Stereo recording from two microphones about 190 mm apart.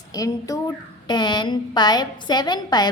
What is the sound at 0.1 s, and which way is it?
A woman's voice, 20° left (ahead or behind).